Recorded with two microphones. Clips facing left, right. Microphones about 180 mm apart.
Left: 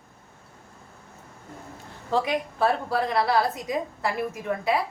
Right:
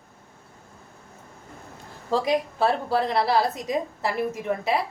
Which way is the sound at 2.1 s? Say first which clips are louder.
Right 2 dB; 35° right (ahead or behind).